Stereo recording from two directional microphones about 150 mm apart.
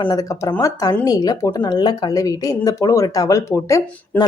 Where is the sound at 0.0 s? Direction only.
25° left (ahead or behind).